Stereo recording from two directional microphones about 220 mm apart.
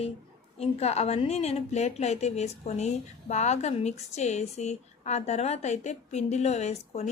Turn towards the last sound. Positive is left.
turn(degrees=30)  # may be behind; listen again after turning